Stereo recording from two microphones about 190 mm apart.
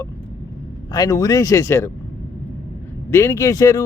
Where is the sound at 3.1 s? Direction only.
15° left (ahead or behind).